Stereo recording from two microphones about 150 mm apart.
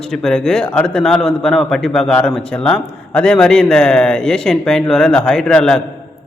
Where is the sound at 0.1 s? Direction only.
5° left (ahead or behind).